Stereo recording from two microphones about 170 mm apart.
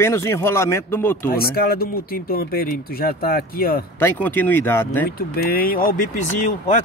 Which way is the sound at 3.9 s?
10° left (ahead or behind).